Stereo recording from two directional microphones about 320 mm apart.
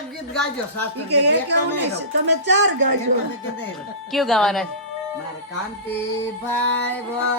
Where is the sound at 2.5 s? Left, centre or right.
Right.